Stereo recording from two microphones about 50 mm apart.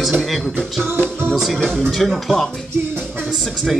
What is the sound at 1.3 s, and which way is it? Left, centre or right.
Speech, centre.